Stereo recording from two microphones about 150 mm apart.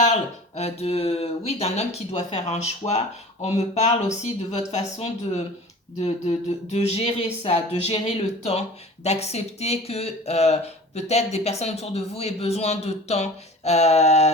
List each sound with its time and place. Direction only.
0.0 s speech: 45° left (ahead or behind)